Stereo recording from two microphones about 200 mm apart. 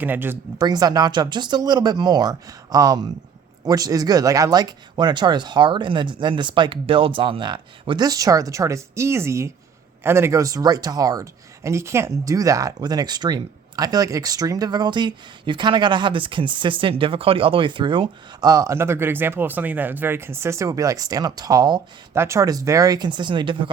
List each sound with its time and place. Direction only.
0.0 s speech: 10° right (ahead or behind)